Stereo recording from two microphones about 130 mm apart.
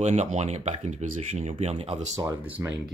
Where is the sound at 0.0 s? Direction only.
60° right (ahead or behind).